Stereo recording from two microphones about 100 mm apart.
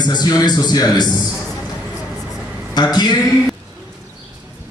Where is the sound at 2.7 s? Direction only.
45° left (ahead or behind).